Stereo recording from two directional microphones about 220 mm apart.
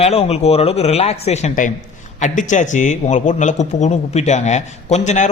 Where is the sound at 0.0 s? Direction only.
30° left (ahead or behind).